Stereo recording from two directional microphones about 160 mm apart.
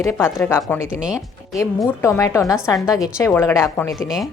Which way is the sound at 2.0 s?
15° left (ahead or behind).